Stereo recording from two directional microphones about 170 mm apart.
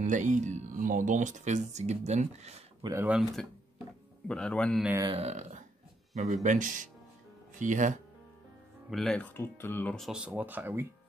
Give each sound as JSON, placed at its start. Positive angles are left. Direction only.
{"t": 0.0, "sound": "speech", "side_deg": -50}
{"t": 2.8, "sound": "speech", "side_deg": -15}
{"t": 3.1, "sound": "speech", "side_deg": -5}
{"t": 5.0, "sound": "speech", "side_deg": -35}
{"t": 8.9, "sound": "speech", "side_deg": 5}